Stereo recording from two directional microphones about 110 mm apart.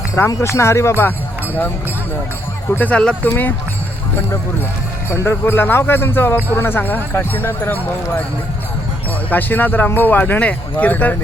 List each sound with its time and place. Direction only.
0.3 s speech: 25° left (ahead or behind)
2.6 s speech: 15° left (ahead or behind)
5.0 s speech: 25° left (ahead or behind)
9.3 s speech: 15° left (ahead or behind)